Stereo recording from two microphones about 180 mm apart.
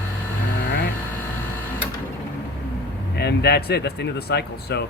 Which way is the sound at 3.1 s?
65° left (ahead or behind).